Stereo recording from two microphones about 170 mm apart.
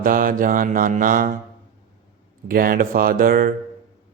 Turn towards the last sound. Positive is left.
turn(degrees=-60)  # may be behind; listen again after turning